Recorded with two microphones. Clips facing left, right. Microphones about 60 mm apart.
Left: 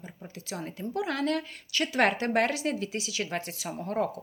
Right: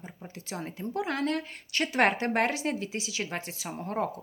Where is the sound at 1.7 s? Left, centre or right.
Right.